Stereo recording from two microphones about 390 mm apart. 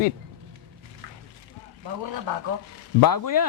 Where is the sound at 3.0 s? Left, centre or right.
Left.